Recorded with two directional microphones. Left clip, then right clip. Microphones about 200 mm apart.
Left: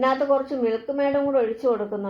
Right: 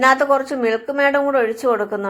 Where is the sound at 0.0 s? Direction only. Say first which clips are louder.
Right 6 dB; 15° right (ahead or behind).